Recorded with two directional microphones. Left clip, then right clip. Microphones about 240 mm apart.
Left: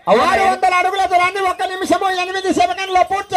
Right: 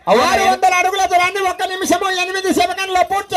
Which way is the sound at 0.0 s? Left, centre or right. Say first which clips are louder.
Even; right.